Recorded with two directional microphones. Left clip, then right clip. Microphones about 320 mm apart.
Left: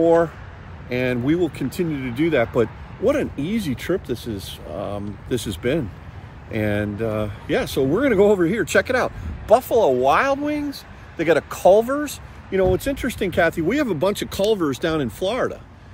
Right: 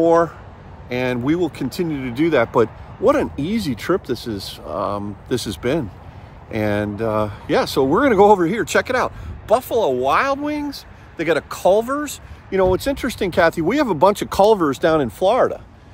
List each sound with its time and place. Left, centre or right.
0.0 s speech: centre